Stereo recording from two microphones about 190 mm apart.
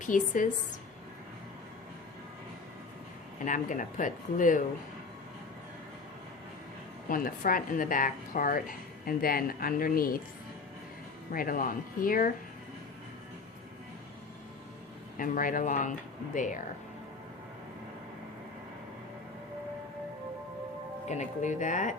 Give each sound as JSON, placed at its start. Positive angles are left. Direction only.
{"t": 0.0, "sound": "speech", "side_deg": 45}
{"t": 3.4, "sound": "speech", "side_deg": 45}
{"t": 7.1, "sound": "speech", "side_deg": 45}
{"t": 11.3, "sound": "speech", "side_deg": 50}
{"t": 15.2, "sound": "speech", "side_deg": 45}
{"t": 21.1, "sound": "speech", "side_deg": 40}